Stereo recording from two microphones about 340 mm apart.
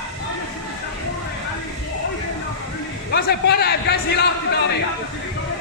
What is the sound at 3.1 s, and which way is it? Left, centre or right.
A man's voice, left.